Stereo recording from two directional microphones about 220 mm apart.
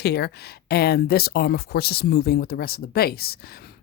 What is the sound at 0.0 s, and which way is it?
Speech, 45° left (ahead or behind).